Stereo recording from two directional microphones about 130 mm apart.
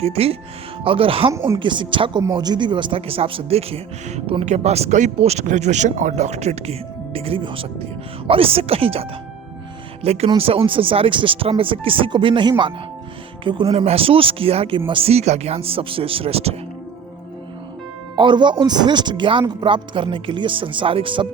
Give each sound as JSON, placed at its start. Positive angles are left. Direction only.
{"t": 0.0, "sound": "a man's voice", "side_deg": -50}
{"t": 1.3, "sound": "speech", "side_deg": -20}
{"t": 1.5, "sound": "a man's voice", "side_deg": -40}
{"t": 18.2, "sound": "speech", "side_deg": -35}